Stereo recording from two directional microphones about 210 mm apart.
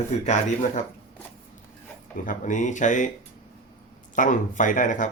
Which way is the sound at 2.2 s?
35° left (ahead or behind).